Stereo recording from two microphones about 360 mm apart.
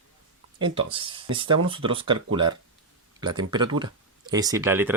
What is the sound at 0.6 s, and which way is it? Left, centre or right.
Speech, centre.